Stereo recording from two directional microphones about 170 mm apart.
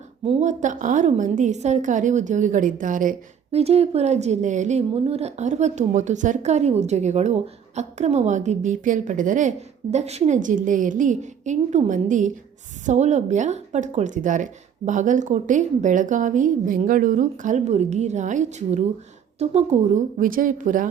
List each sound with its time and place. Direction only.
0.3 s a woman's voice: 40° right (ahead or behind)
3.5 s a woman's voice: 35° right (ahead or behind)